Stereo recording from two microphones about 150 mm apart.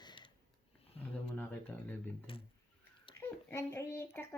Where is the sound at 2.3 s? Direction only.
35° left (ahead or behind).